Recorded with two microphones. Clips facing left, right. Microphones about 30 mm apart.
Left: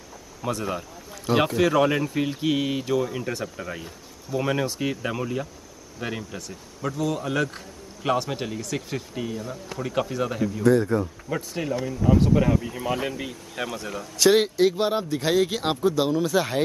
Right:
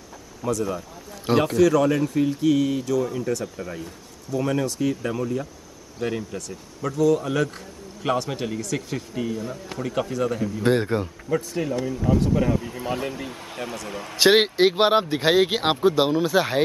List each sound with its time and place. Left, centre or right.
0.5 s speech: left
1.3 s speech: right
1.6 s speech: left
5.9 s a man's voice: centre
10.6 s speech: right
11.2 s a man's voice: centre
12.2 s a man's voice: centre
13.3 s speech: right